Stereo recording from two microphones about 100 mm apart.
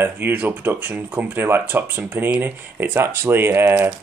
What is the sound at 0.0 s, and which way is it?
Speech, 20° right (ahead or behind).